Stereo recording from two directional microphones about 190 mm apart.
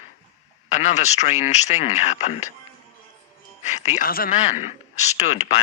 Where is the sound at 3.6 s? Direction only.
35° left (ahead or behind).